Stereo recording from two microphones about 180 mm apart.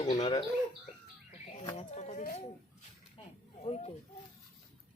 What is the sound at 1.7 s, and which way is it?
Speech, 40° left (ahead or behind).